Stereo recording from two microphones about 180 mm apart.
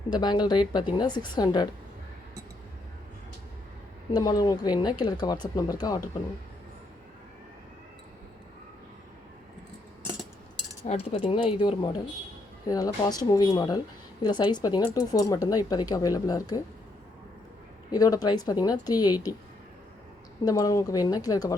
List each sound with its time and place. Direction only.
0.1 s a woman's voice: 25° left (ahead or behind)
4.1 s a woman's voice: 20° left (ahead or behind)
10.8 s a woman's voice: 35° left (ahead or behind)
17.9 s a woman's voice: 20° left (ahead or behind)
20.4 s a woman's voice: 20° left (ahead or behind)